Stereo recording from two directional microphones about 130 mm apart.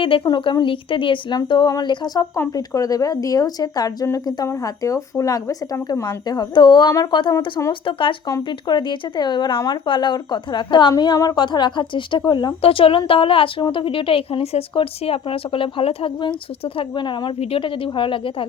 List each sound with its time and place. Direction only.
0.0 s a woman's voice: 40° left (ahead or behind)